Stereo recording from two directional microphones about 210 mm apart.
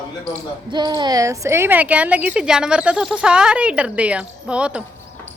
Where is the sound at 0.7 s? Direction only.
20° right (ahead or behind); by 4.8 s 5° right (ahead or behind).